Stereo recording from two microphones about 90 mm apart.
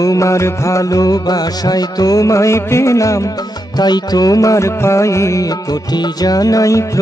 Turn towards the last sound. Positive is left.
turn(degrees=35)  # may be behind; listen again after turning